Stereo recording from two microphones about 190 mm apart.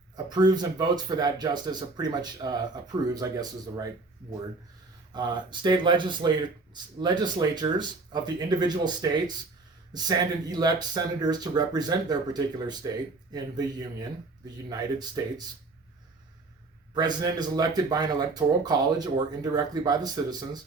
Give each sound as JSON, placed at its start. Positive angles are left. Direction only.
{"t": 0.3, "sound": "speech", "side_deg": -20}
{"t": 5.1, "sound": "speech", "side_deg": -25}
{"t": 16.9, "sound": "speech", "side_deg": -20}